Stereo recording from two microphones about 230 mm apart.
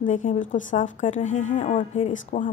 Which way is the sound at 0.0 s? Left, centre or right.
Left.